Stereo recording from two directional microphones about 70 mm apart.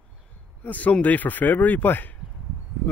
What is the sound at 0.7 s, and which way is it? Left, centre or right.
Speech, left.